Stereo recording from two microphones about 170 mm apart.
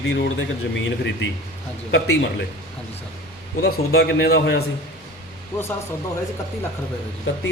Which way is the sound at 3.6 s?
70° left (ahead or behind).